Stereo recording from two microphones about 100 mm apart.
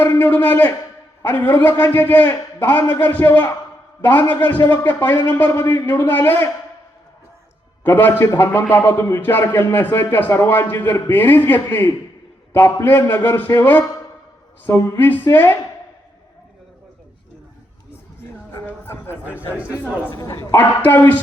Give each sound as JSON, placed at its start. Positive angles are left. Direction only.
{"t": 0.0, "sound": "a man's voice", "side_deg": 20}
{"t": 7.9, "sound": "a man's voice", "side_deg": 20}
{"t": 18.6, "sound": "a man's voice", "side_deg": 25}